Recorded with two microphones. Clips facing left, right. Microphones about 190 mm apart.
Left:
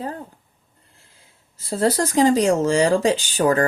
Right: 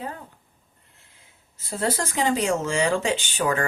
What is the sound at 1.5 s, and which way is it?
Speech, 35° left (ahead or behind).